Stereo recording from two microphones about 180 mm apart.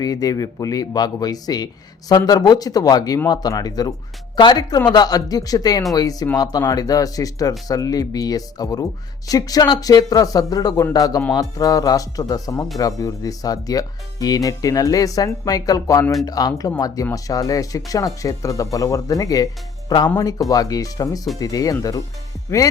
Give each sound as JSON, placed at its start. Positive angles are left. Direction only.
{"t": 0.0, "sound": "speech", "side_deg": 20}